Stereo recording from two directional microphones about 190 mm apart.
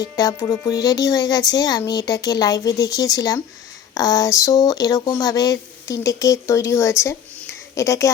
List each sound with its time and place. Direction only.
0.2 s speech: 20° left (ahead or behind)